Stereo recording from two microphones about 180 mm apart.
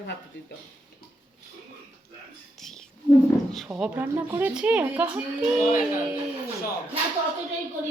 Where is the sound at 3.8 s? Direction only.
10° right (ahead or behind).